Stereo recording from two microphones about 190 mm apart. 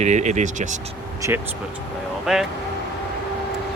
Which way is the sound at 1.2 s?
15° right (ahead or behind).